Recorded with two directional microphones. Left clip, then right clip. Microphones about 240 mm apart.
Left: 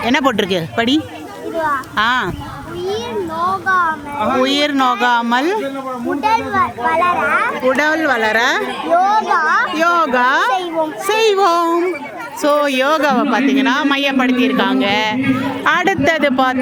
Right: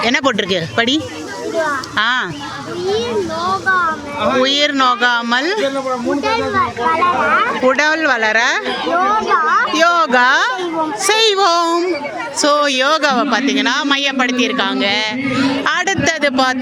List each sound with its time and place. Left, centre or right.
0.0 s speech: centre
3.7 s speech: left
4.4 s speech: centre
6.1 s a child's voice: left
7.7 s speech: centre
8.9 s speech: left
9.7 s female singing: centre
12.4 s speech: centre